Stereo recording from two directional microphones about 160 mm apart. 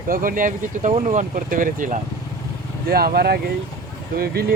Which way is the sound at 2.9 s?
75° right (ahead or behind).